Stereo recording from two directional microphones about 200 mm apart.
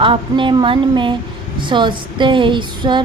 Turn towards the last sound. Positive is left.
turn(degrees=-25)  # may be behind; listen again after turning